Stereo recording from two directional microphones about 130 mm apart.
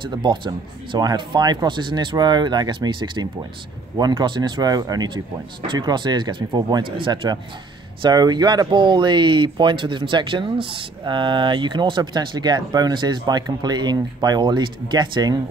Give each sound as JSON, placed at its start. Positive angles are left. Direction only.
{"t": 0.0, "sound": "speech", "side_deg": -35}